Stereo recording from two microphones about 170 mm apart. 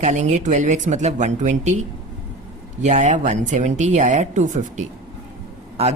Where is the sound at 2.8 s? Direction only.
45° right (ahead or behind).